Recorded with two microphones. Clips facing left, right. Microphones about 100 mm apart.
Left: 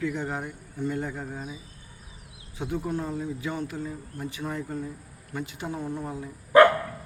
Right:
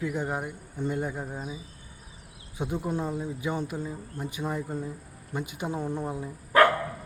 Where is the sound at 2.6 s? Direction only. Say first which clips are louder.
Even; 15° right (ahead or behind).